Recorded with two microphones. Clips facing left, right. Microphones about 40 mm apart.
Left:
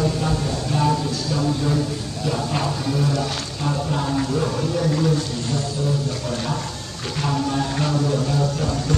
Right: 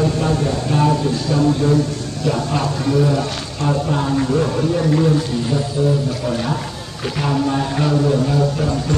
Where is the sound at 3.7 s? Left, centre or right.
Centre.